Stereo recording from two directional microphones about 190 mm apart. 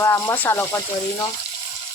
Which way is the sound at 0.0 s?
15° left (ahead or behind).